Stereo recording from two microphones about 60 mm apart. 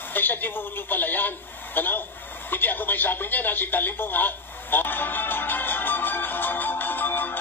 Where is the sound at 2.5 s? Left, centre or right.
Left.